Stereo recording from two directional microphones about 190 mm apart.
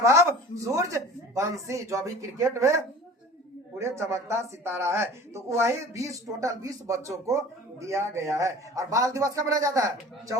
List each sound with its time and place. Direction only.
0.0 s speech: 15° right (ahead or behind)